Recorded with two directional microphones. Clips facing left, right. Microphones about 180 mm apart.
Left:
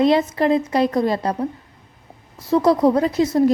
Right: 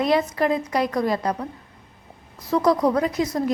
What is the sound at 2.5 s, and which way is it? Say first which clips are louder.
A woman's voice: left 4 dB; 25° left (ahead or behind).